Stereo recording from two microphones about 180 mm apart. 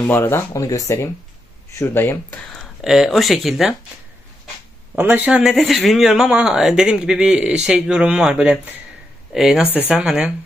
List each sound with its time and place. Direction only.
0.0 s speech: 15° left (ahead or behind)
2.8 s speech: centre (ahead or behind)
4.9 s speech: 10° right (ahead or behind)